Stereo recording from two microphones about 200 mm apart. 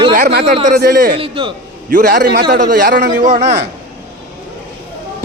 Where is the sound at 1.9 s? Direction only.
45° right (ahead or behind).